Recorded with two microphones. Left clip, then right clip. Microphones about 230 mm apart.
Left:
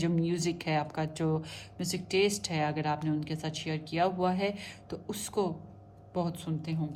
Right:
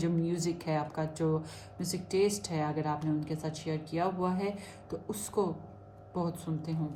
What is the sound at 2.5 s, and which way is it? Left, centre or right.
Speech, left.